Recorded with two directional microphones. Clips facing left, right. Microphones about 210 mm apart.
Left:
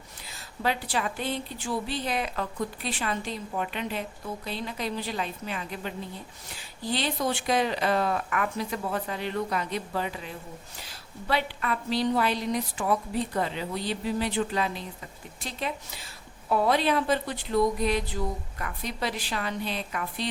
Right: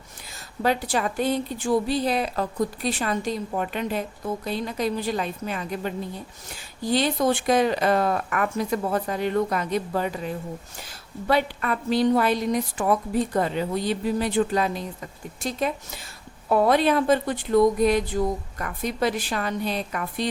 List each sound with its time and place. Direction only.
0.6 s speech: 45° right (ahead or behind)
6.9 s speech: 45° right (ahead or behind)